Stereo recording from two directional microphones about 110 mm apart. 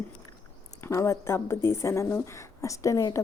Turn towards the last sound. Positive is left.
turn(degrees=30)  # may be behind; listen again after turning